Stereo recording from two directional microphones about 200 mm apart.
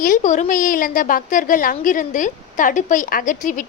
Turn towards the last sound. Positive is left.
turn(degrees=40)  # may be behind; listen again after turning